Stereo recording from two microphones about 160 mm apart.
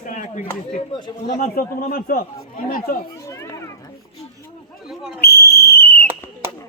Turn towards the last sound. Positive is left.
turn(degrees=75)  # may be behind; listen again after turning